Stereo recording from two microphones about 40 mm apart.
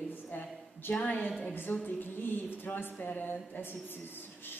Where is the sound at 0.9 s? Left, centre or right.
Left.